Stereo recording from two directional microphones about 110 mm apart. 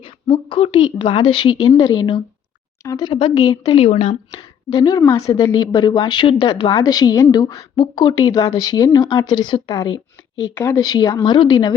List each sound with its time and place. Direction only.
0.0 s a woman's voice: 50° left (ahead or behind)
1.6 s a woman's voice: 40° left (ahead or behind)
3.7 s speech: 75° left (ahead or behind)
4.7 s a woman's voice: 35° left (ahead or behind)